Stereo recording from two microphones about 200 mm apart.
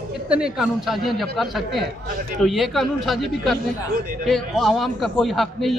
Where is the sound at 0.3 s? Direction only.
5° right (ahead or behind).